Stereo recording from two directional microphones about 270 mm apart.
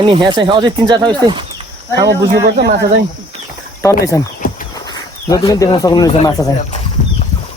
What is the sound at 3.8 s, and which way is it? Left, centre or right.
Speech, centre.